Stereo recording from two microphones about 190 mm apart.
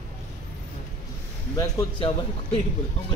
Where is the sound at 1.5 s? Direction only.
20° left (ahead or behind).